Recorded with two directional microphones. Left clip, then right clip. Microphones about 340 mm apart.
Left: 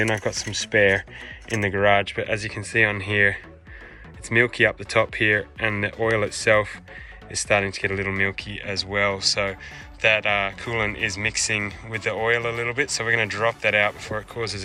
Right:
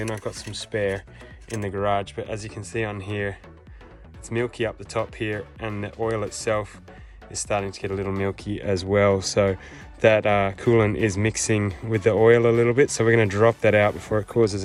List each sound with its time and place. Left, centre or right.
0.0 s speech: centre